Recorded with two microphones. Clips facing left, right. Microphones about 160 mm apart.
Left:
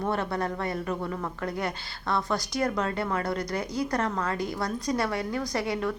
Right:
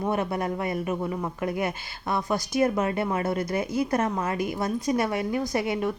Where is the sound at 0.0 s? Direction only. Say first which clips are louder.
Right 2 dB; 15° right (ahead or behind).